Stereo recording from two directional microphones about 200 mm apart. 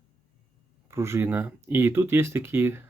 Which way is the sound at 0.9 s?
15° right (ahead or behind).